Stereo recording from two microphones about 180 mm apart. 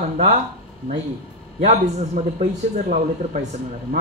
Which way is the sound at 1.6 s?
40° right (ahead or behind).